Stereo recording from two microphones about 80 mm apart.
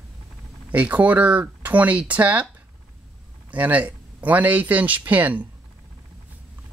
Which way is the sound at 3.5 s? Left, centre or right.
Centre.